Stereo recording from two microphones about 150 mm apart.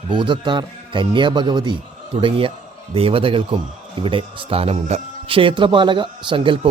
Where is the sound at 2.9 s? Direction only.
40° right (ahead or behind).